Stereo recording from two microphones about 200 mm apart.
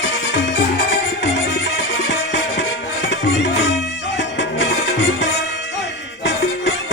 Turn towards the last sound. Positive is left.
turn(degrees=65)  # may be behind; listen again after turning